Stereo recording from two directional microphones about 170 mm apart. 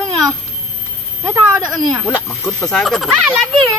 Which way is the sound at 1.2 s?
20° right (ahead or behind).